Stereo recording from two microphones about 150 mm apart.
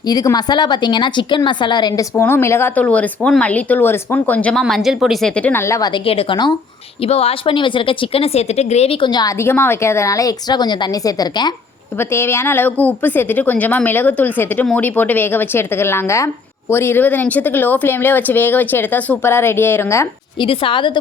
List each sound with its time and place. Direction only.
0.0 s a woman's voice: 25° left (ahead or behind); by 4.6 s 10° left (ahead or behind)
4.6 s a woman's voice: centre (ahead or behind); by 5.9 s 20° left (ahead or behind)
5.9 s speech: 35° left (ahead or behind)
7.0 s speech: 40° left (ahead or behind)
9.4 s a woman's voice: 15° left (ahead or behind)
11.9 s a woman's voice: 15° left (ahead or behind)
20.4 s speech: 35° left (ahead or behind)